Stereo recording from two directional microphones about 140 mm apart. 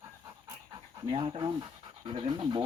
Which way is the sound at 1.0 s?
40° right (ahead or behind).